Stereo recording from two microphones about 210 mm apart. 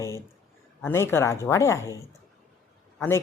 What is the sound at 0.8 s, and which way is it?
Speech, 10° left (ahead or behind).